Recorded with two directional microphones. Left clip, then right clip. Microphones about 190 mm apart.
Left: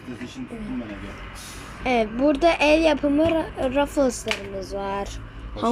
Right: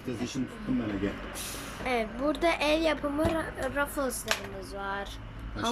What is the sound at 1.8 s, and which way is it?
A woman's voice, 10° left (ahead or behind).